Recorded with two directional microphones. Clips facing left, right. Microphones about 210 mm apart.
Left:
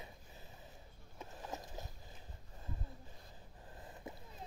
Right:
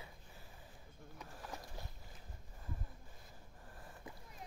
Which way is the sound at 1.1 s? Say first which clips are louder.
Left 3 dB; 25° left (ahead or behind).